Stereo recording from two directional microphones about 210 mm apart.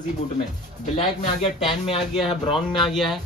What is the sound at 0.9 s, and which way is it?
Speech, 30° left (ahead or behind).